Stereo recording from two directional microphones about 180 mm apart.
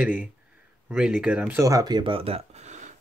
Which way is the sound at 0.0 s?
5° right (ahead or behind).